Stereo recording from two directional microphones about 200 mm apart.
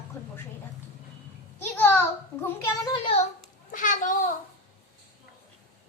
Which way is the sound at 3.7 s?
40° left (ahead or behind).